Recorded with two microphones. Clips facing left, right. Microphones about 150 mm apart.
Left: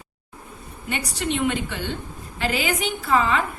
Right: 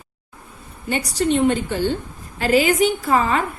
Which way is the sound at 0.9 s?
35° right (ahead or behind).